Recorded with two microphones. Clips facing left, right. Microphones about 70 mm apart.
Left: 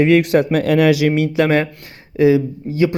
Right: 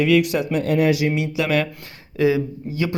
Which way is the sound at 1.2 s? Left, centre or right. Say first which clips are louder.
Left 6 dB; left.